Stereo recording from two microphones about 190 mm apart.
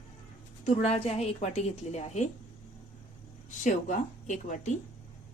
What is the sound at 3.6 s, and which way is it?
A woman's voice, 40° left (ahead or behind).